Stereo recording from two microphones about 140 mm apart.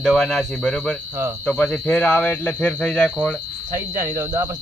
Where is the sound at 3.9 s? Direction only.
70° right (ahead or behind).